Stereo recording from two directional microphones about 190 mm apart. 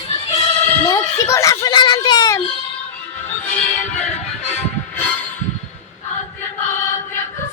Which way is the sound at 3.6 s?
35° left (ahead or behind).